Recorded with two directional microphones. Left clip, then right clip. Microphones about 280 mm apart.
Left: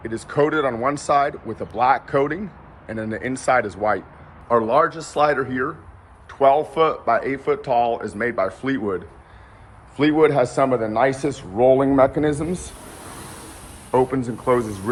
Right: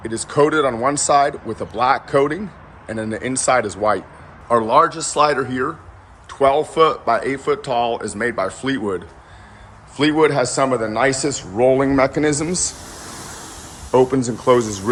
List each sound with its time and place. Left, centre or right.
0.0 s speech: centre
10.0 s speech: centre
13.9 s speech: centre